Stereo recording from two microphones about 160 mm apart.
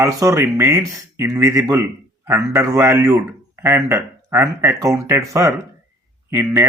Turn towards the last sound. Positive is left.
turn(degrees=-15)  # may be behind; listen again after turning